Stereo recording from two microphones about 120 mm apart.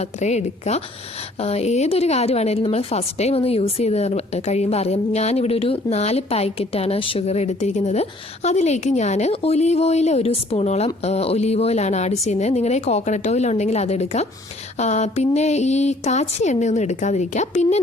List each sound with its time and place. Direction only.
0.0 s a woman's voice: 70° left (ahead or behind)